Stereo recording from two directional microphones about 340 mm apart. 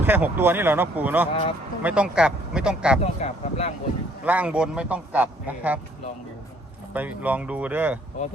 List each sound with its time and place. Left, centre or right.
0.0 s a man's voice: centre
1.3 s speech: centre
1.8 s a man's voice: centre
3.0 s speech: centre
4.2 s a man's voice: centre
6.9 s a man's voice: centre